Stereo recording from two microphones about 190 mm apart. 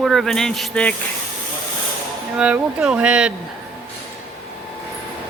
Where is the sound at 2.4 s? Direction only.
5° right (ahead or behind).